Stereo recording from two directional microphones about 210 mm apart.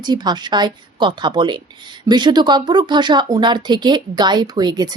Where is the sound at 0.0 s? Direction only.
20° right (ahead or behind).